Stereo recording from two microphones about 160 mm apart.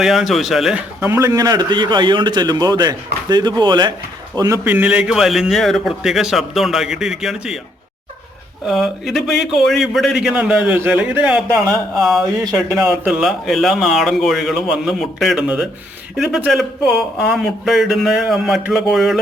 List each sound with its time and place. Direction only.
0.0 s a man's voice: centre (ahead or behind)
8.6 s a man's voice: centre (ahead or behind)